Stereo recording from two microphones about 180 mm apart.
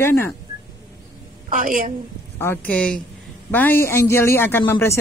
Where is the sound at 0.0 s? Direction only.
15° left (ahead or behind).